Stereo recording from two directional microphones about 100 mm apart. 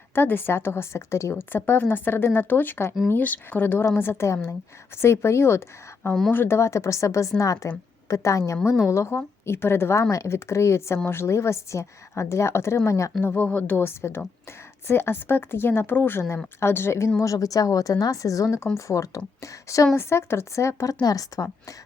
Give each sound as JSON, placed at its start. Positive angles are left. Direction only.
{"t": 0.1, "sound": "a woman's voice", "side_deg": 20}
{"t": 13.2, "sound": "a woman's voice", "side_deg": 20}